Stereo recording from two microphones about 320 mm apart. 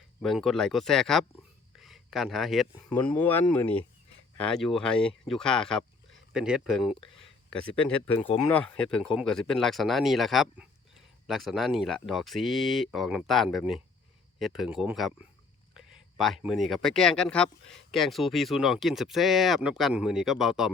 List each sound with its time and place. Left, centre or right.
0.2 s speech: centre